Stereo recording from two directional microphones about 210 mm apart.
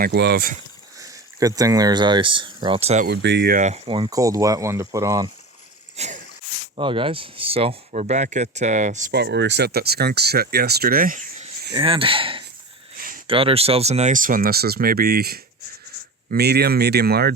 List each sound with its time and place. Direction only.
0.0 s speech: 50° right (ahead or behind)
0.9 s speech: 15° right (ahead or behind); by 3.1 s 30° right (ahead or behind)
3.1 s speech: 50° right (ahead or behind)
3.8 s speech: 25° right (ahead or behind)
6.0 s a sound: 30° right (ahead or behind)
6.7 s speech: 25° right (ahead or behind)
9.1 s speech: 55° right (ahead or behind); by 11.7 s 40° right (ahead or behind)
11.7 s speech: 25° right (ahead or behind)
13.0 s a sound: 40° right (ahead or behind)
13.2 s speech: 25° right (ahead or behind); by 17.3 s 50° right (ahead or behind)